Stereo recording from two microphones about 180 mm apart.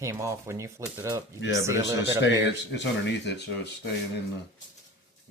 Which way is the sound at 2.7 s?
75° left (ahead or behind).